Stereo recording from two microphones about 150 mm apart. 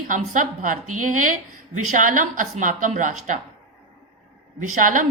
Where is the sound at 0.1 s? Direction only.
60° right (ahead or behind).